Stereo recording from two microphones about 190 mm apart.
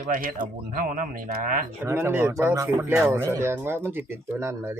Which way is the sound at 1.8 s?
15° right (ahead or behind).